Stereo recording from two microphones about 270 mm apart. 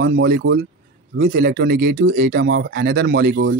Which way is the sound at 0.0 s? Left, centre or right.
Right.